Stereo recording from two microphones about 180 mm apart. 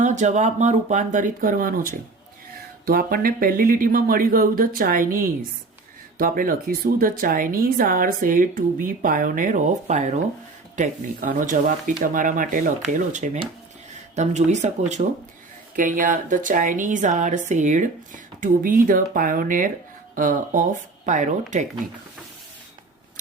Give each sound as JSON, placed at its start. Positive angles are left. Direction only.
{"t": 0.0, "sound": "speech", "side_deg": -40}